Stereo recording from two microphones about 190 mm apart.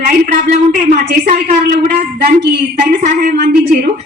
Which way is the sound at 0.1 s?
45° right (ahead or behind).